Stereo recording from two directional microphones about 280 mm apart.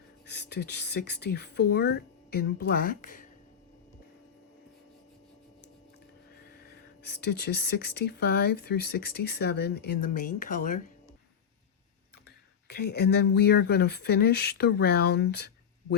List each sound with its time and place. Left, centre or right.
0.3 s speech: left
7.0 s speech: left
12.6 s speech: left